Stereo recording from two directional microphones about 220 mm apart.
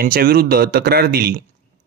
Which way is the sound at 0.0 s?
40° right (ahead or behind).